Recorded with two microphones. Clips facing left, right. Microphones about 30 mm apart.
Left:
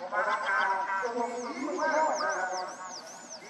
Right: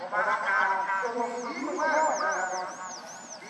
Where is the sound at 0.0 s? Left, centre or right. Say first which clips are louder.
Right 2 dB; right.